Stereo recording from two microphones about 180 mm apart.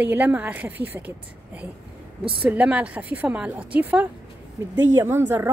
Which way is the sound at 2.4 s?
5° right (ahead or behind).